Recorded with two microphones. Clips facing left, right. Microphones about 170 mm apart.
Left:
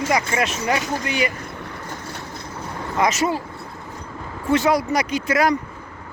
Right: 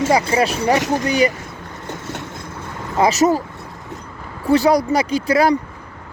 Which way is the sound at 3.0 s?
35° right (ahead or behind).